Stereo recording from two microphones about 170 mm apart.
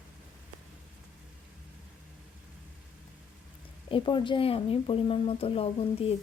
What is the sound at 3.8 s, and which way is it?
Speech, 30° left (ahead or behind).